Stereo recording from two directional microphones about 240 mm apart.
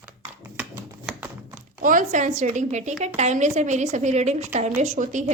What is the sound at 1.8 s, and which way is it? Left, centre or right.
A woman's voice, right.